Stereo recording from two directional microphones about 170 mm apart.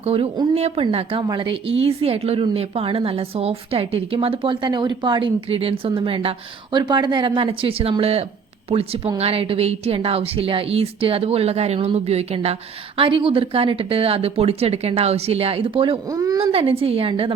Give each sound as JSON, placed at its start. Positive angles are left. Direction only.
{"t": 0.0, "sound": "a woman's voice", "side_deg": -35}
{"t": 16.0, "sound": "a woman's voice", "side_deg": -20}
{"t": 16.4, "sound": "a woman's voice", "side_deg": -35}